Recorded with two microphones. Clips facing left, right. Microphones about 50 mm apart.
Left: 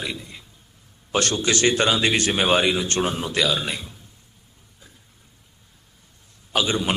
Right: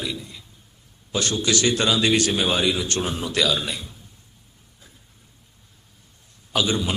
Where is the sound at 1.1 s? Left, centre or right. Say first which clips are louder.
Left 2 dB; left.